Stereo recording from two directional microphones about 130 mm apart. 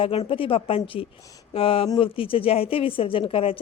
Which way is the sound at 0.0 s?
45° left (ahead or behind).